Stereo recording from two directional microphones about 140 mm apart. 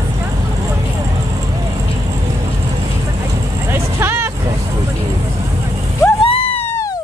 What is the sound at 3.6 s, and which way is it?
Vehicle, 15° right (ahead or behind).